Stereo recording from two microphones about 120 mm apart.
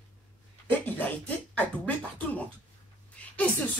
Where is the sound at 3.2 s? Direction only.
10° left (ahead or behind).